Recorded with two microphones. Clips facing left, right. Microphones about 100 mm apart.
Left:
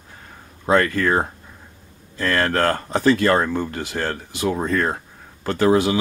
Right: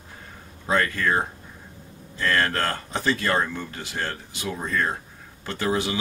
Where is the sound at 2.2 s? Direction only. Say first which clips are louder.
Left 4 dB; 50° left (ahead or behind).